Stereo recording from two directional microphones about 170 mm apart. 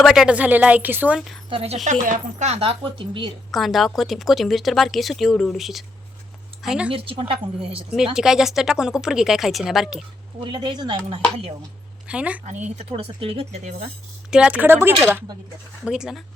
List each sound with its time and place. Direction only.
0.0 s a woman's voice: centre (ahead or behind)
1.5 s speech: 35° right (ahead or behind)
3.5 s a woman's voice: centre (ahead or behind)
6.9 s speech: 30° right (ahead or behind)
7.9 s speech: 5° right (ahead or behind)
10.4 s speech: 25° right (ahead or behind)
12.0 s speech: 5° right (ahead or behind)
12.5 s speech: 40° right (ahead or behind)
14.3 s a woman's voice: 5° right (ahead or behind)